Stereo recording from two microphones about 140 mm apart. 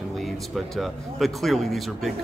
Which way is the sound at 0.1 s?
Centre (ahead or behind).